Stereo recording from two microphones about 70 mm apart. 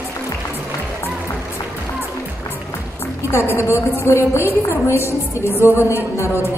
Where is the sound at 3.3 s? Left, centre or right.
Left.